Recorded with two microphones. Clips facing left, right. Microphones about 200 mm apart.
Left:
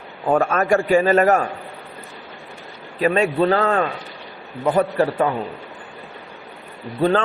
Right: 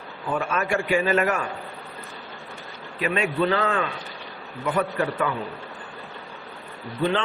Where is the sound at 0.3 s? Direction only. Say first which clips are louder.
Left 8 dB; 40° left (ahead or behind).